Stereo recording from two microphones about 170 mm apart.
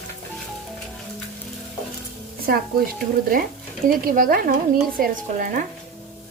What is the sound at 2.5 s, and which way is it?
Speech, 60° right (ahead or behind).